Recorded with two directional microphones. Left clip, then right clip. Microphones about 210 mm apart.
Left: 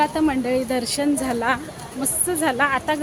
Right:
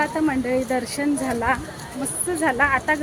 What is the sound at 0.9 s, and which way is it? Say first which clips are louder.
Speech: left 1 dB; 20° left (ahead or behind).